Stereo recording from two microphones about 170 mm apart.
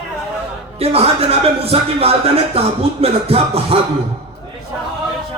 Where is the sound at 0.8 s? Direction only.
35° right (ahead or behind).